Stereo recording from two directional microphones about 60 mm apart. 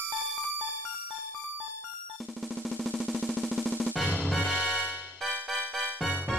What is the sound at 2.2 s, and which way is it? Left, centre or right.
Music, centre.